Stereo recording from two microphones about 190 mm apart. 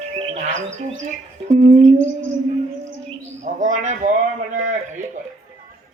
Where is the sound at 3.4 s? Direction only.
40° right (ahead or behind).